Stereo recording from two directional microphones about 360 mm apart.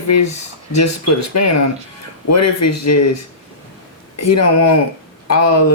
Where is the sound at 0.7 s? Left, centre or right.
Left.